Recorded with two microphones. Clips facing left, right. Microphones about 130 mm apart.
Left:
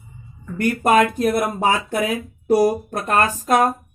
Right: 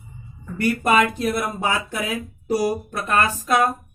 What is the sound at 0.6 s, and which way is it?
Speech, 45° left (ahead or behind).